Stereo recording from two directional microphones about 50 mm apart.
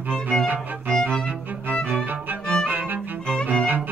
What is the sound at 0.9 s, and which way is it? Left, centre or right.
Music, centre.